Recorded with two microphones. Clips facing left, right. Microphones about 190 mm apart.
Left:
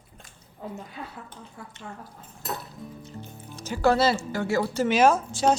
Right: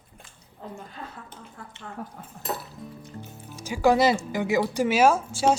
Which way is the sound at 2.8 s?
5° right (ahead or behind).